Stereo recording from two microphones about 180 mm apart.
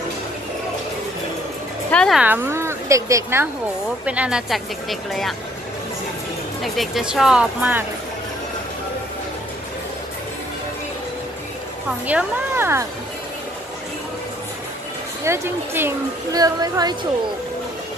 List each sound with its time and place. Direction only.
1.9 s speech: 5° left (ahead or behind)
2.2 s a woman's voice: 10° right (ahead or behind)
6.6 s speech: centre (ahead or behind)
12.1 s a woman's voice: 10° right (ahead or behind)
15.2 s a woman's voice: 15° right (ahead or behind)